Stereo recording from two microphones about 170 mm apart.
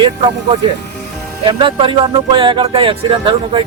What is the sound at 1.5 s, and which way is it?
Speech, 30° right (ahead or behind).